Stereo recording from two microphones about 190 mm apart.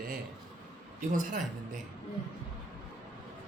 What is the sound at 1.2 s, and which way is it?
Speech, 40° right (ahead or behind).